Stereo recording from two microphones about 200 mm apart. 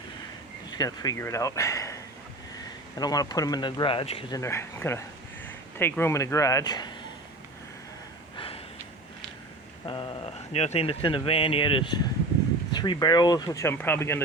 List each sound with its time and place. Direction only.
0.7 s speech: 20° left (ahead or behind)
3.0 s speech: 20° left (ahead or behind)
4.4 s speech: 15° left (ahead or behind)
8.4 s gasp: 30° left (ahead or behind)
9.8 s speech: 25° left (ahead or behind)